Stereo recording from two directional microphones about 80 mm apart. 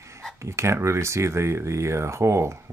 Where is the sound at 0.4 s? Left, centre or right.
Right.